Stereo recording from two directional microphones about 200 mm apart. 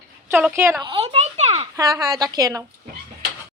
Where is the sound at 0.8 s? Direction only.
30° right (ahead or behind).